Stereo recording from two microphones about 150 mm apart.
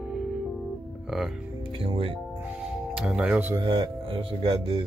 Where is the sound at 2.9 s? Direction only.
5° right (ahead or behind).